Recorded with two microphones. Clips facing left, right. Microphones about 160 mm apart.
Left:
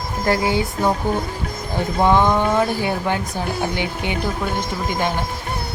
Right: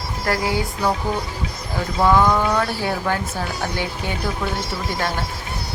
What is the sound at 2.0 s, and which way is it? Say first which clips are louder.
Speech: even; 20° left (ahead or behind).